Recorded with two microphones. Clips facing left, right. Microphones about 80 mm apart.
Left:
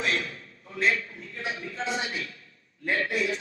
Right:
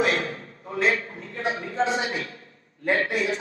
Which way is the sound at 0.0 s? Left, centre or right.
Right.